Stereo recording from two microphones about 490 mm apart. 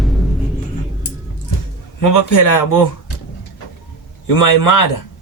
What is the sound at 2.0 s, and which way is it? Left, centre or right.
Speech, left.